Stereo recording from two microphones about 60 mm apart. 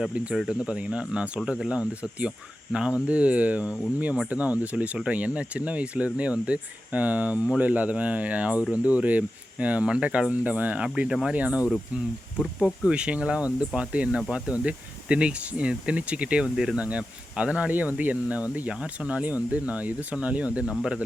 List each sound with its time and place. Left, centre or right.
0.3 s speech: centre
11.1 s speech: centre
11.3 s speech: right
12.4 s speech: centre
12.9 s speech: centre